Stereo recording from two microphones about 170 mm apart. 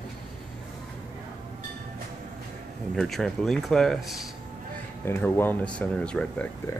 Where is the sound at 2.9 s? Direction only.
Centre (ahead or behind).